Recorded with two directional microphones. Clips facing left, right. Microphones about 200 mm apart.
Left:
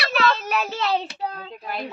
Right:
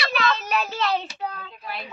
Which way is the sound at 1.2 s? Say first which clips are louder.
Left 2 dB; 30° left (ahead or behind).